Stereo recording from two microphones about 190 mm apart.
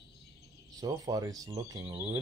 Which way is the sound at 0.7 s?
20° right (ahead or behind).